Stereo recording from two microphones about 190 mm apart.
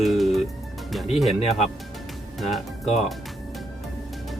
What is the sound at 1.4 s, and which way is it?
Speech, 35° left (ahead or behind).